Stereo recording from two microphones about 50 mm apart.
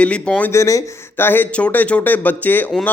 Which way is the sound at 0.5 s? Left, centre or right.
Left.